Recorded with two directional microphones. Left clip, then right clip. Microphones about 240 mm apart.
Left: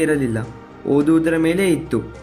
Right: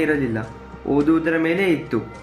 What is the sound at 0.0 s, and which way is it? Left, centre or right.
A man's voice, left.